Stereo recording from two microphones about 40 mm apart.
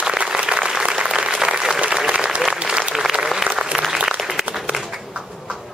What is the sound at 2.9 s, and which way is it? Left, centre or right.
Applause, centre.